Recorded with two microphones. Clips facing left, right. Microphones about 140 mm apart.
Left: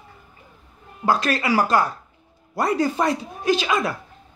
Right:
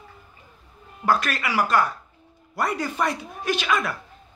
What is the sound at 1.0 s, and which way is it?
Speech, 30° left (ahead or behind).